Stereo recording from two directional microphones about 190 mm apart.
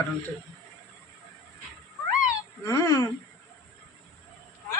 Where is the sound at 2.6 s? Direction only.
15° left (ahead or behind).